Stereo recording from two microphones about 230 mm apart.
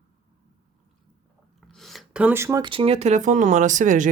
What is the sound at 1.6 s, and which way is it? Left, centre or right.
Speech, centre.